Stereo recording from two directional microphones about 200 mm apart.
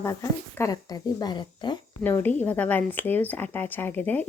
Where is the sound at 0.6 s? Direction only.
20° left (ahead or behind).